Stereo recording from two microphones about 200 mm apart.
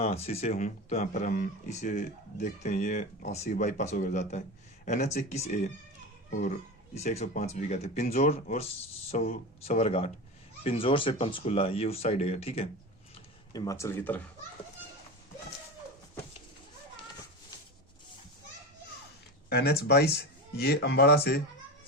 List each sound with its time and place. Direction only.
0.0 s speech: 30° left (ahead or behind); by 1.5 s 50° left (ahead or behind)
1.7 s speech: 35° left (ahead or behind)
13.5 s speech: 20° left (ahead or behind)
19.5 s speech: 50° left (ahead or behind)